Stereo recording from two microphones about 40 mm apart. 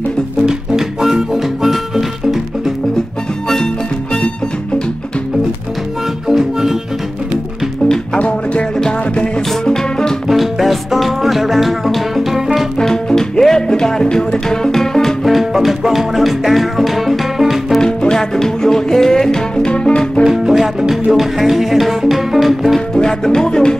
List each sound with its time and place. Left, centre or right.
0.4 s music: centre
6.2 s music: centre
8.2 s music: left
9.7 s music: centre
10.2 s music: centre
12.7 s music: centre
15.2 s music: centre
18.1 s music: centre
20.2 s music: centre
22.9 s music: centre